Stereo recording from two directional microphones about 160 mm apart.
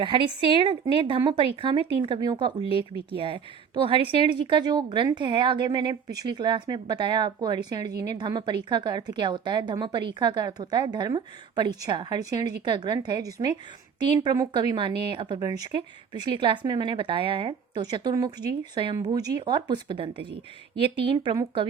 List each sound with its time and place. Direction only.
0.0 s a woman's voice: 30° right (ahead or behind)